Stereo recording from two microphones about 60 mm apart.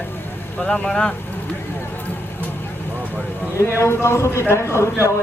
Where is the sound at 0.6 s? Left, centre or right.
Centre.